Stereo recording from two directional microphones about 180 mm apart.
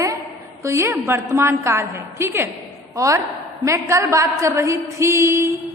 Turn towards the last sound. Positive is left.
turn(degrees=-15)  # may be behind; listen again after turning